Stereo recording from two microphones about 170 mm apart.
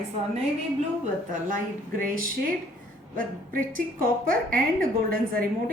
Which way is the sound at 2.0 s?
50° right (ahead or behind).